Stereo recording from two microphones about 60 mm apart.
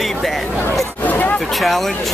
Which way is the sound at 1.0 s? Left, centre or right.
Left.